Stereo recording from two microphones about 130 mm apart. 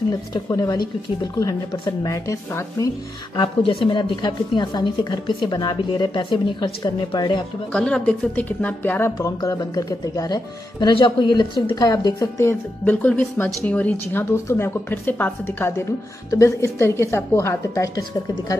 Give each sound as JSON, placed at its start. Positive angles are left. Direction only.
{"t": 0.3, "sound": "speech", "side_deg": 30}
{"t": 3.3, "sound": "a woman's voice", "side_deg": 40}
{"t": 7.7, "sound": "speech", "side_deg": 5}
{"t": 12.8, "sound": "speech", "side_deg": 15}